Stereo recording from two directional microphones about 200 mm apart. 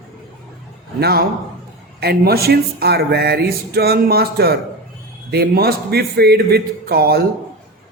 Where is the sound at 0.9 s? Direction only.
50° right (ahead or behind).